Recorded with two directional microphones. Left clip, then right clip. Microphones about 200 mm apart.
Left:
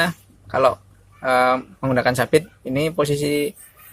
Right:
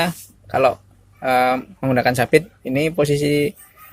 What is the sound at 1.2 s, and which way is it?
Speech, 20° right (ahead or behind).